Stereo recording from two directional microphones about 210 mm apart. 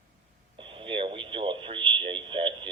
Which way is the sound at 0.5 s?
25° right (ahead or behind).